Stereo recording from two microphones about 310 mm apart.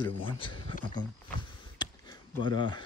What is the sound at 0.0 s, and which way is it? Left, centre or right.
Speech, centre.